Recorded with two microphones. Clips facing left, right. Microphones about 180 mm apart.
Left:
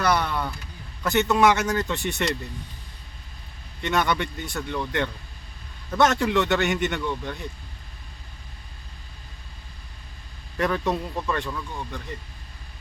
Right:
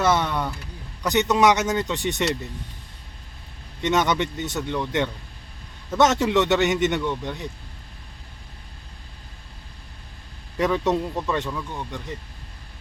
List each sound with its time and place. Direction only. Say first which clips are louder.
0.0 s speech: right 2 dB; 20° right (ahead or behind)
3.8 s speech: right 3 dB; 20° right (ahead or behind)
10.6 s speech: right 3 dB; 20° right (ahead or behind)